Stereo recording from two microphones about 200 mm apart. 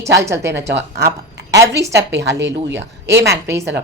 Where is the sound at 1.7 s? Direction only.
60° right (ahead or behind).